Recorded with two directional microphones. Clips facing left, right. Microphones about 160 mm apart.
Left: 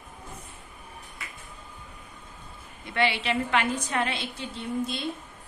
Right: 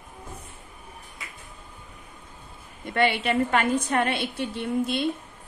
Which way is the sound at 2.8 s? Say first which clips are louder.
Right 3 dB; 50° right (ahead or behind).